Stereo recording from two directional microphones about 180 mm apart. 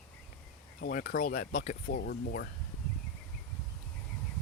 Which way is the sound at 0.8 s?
55° left (ahead or behind).